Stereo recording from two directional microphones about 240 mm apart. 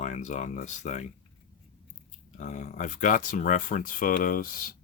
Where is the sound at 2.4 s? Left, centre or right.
Left.